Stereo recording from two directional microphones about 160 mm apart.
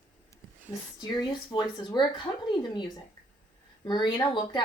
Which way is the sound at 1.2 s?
30° left (ahead or behind).